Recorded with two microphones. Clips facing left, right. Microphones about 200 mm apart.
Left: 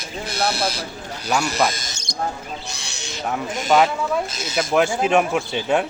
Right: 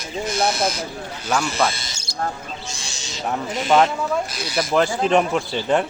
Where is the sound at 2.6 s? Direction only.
65° left (ahead or behind).